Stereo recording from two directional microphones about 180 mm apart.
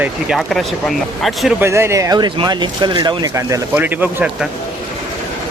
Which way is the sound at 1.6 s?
15° right (ahead or behind).